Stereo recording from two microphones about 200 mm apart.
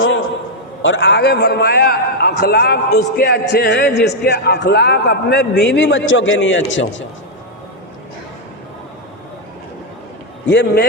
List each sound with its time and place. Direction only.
0.0 s a sound: 75° left (ahead or behind)
0.8 s a man's voice: 70° left (ahead or behind)
10.5 s a man's voice: 55° left (ahead or behind)